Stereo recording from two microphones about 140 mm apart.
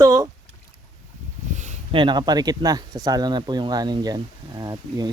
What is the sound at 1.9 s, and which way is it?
Speech, 35° right (ahead or behind).